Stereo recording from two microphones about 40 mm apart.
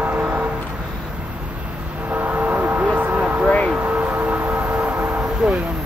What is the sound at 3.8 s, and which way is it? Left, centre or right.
Music, right.